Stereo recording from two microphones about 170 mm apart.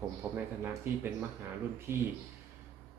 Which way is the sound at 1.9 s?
15° right (ahead or behind).